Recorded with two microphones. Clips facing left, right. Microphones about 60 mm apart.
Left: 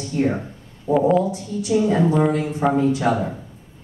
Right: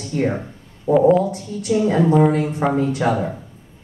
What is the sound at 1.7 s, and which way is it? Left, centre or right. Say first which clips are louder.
A woman's voice: right 2 dB; right.